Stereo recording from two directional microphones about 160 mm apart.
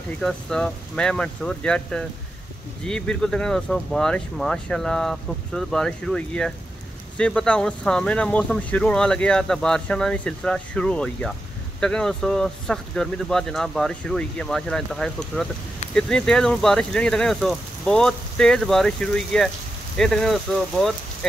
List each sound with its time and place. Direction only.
0.2 s speech: 5° left (ahead or behind)